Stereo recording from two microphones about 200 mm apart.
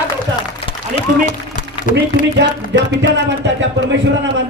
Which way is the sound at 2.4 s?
60° right (ahead or behind).